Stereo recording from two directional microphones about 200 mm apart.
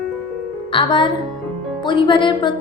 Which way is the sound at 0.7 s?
25° left (ahead or behind).